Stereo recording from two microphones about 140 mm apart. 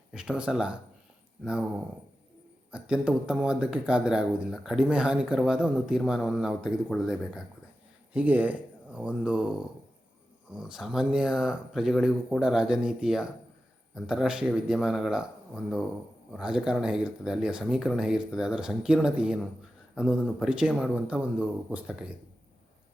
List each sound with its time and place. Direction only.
0.1 s speech: 5° right (ahead or behind)
2.7 s speech: 5° right (ahead or behind)